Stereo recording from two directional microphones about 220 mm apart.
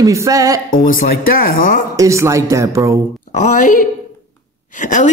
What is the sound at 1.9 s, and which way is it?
Speech, 15° right (ahead or behind).